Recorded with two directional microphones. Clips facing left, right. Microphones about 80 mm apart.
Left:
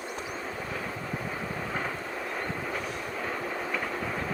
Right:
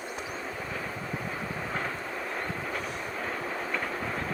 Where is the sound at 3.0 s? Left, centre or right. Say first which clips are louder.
Left 1 dB; centre.